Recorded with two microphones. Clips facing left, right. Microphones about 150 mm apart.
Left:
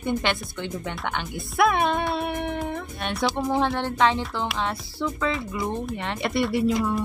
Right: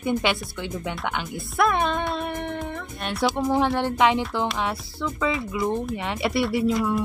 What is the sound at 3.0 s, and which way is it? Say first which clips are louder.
Speech: right 2 dB; 5° right (ahead or behind).